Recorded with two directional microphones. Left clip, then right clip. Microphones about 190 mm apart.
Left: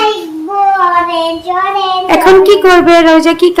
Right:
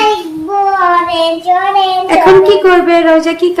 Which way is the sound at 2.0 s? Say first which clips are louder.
Left 2 dB; 20° left (ahead or behind).